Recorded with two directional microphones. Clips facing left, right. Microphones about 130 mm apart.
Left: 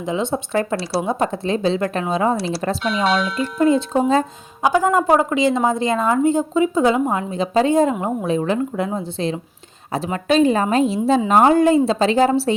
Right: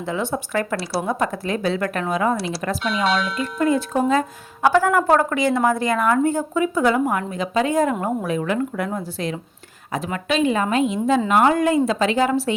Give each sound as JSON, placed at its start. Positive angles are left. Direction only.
{"t": 0.0, "sound": "a woman's voice", "side_deg": 20}
{"t": 2.8, "sound": "speech", "side_deg": 0}
{"t": 3.6, "sound": "a woman's voice", "side_deg": 25}